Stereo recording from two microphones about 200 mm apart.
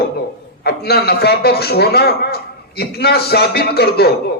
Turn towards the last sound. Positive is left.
turn(degrees=55)  # may be behind; listen again after turning